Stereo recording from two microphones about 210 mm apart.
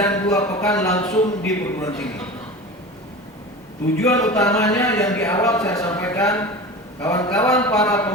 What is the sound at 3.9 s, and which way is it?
A man's voice, 15° left (ahead or behind).